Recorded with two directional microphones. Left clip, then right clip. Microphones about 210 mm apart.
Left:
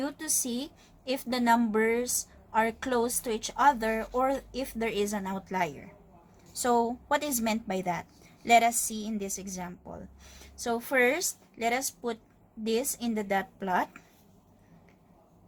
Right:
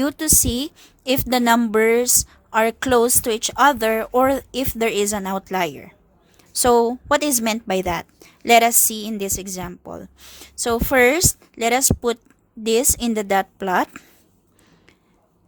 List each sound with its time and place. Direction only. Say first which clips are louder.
0.0 s a woman's voice: right 12 dB; 55° right (ahead or behind)